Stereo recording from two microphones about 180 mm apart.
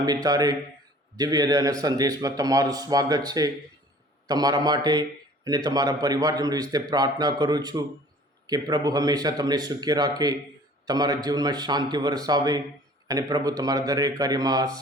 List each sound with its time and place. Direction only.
0.0 s a man's voice: 20° right (ahead or behind)